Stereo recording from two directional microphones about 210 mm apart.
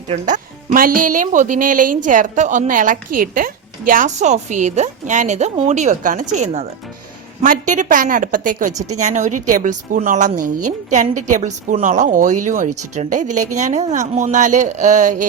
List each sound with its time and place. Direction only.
0.1 s speech: 35° right (ahead or behind)